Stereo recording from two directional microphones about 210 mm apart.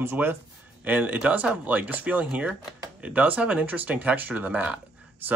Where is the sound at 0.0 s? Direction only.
10° right (ahead or behind).